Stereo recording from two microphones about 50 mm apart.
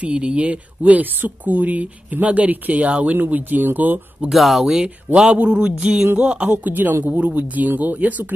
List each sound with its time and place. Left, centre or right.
0.0 s speech: right
4.3 s speech: centre
4.6 s speech: centre
6.5 s speech: right